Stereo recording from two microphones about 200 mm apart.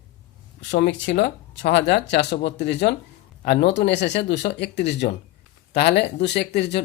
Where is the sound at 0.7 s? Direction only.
65° left (ahead or behind).